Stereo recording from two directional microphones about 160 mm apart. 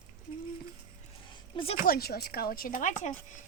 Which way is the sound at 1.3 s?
30° left (ahead or behind).